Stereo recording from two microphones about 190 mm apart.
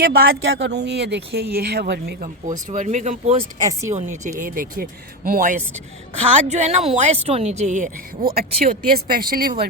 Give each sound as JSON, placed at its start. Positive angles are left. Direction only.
{"t": 0.0, "sound": "speech", "side_deg": -55}
{"t": 0.4, "sound": "speech", "side_deg": -65}
{"t": 2.5, "sound": "speech", "side_deg": -40}
{"t": 3.6, "sound": "speech", "side_deg": -15}
{"t": 3.9, "sound": "speech", "side_deg": -40}